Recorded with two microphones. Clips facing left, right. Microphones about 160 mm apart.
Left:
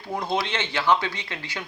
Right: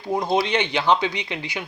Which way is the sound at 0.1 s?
15° right (ahead or behind).